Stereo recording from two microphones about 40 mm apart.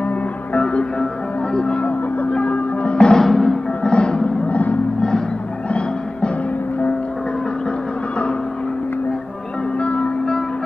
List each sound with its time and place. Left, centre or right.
0.6 s music: left
1.8 s music: left
3.2 s music: centre
3.8 s music: left
4.5 s music: left
5.7 s music: left
9.8 s music: left